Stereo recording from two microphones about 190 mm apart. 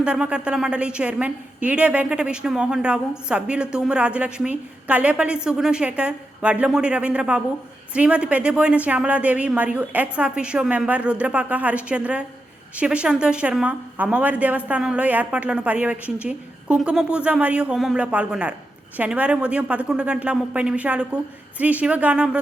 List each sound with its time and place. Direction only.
0.0 s a woman's voice: 5° right (ahead or behind)